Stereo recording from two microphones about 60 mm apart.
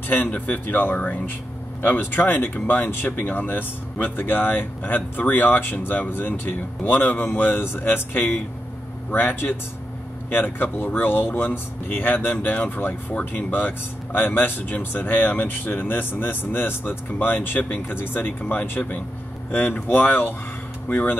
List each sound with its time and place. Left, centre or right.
0.1 s speech: left